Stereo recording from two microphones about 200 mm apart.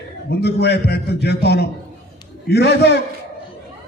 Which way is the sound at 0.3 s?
55° left (ahead or behind).